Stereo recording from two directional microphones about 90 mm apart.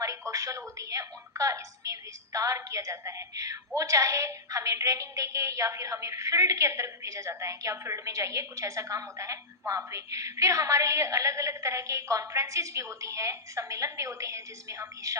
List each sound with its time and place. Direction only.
0.0 s a woman's voice: 40° right (ahead or behind)